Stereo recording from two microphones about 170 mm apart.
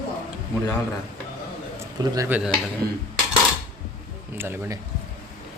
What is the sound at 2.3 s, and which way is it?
Speech, 5° right (ahead or behind).